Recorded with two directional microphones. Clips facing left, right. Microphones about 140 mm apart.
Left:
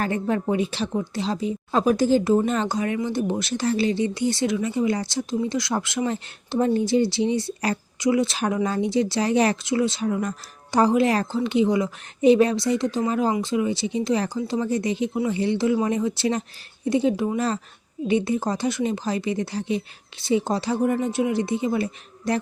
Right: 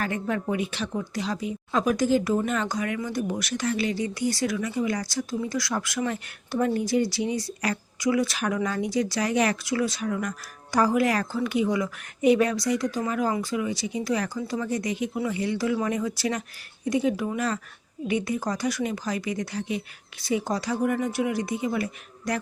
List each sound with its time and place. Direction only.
0.0 s a woman's voice: 30° left (ahead or behind)